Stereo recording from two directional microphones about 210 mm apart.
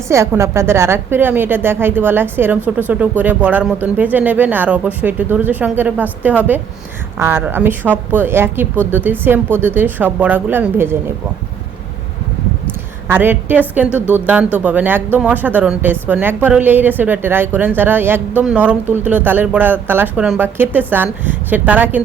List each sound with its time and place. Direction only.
0.1 s speech: 15° right (ahead or behind)
13.1 s speech: 10° right (ahead or behind)